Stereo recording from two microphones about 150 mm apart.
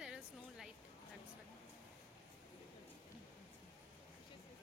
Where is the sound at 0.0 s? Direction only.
5° right (ahead or behind).